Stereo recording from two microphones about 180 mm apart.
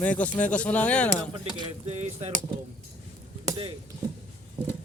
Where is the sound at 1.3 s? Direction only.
25° right (ahead or behind).